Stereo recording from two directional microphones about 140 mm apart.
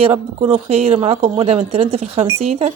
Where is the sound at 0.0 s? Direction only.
50° right (ahead or behind).